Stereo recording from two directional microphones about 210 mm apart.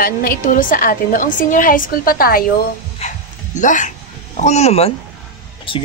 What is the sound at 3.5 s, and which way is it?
Speech, 35° left (ahead or behind).